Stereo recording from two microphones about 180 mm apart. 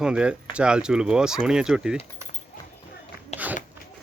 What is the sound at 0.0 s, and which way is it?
Speech, 5° right (ahead or behind).